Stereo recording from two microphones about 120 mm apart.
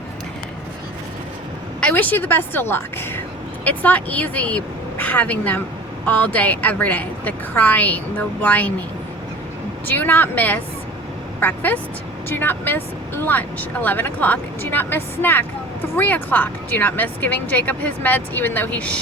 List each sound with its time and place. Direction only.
1.8 s speech: 15° left (ahead or behind)
9.8 s a woman's voice: 15° left (ahead or behind)